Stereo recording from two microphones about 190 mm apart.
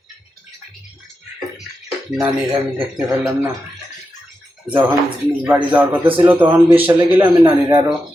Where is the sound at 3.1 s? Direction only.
10° right (ahead or behind).